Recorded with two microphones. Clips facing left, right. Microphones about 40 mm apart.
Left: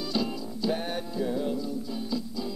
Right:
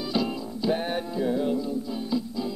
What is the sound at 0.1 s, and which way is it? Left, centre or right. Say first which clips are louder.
Music: right 3 dB; centre.